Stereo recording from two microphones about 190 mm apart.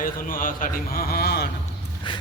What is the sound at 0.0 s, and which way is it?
A man's voice, 45° left (ahead or behind).